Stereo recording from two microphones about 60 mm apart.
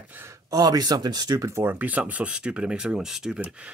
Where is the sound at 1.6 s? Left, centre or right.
Right; by 3.4 s centre.